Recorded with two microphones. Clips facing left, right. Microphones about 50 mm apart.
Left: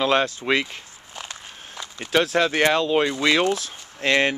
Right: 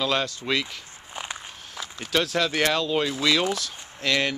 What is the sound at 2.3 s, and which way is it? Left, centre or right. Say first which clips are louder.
Speech: left 4 dB; centre.